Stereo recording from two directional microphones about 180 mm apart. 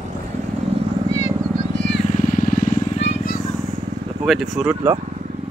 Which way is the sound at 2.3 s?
50° left (ahead or behind).